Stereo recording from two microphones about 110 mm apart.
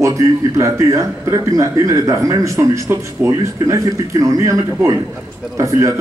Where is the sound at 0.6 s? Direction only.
30° right (ahead or behind).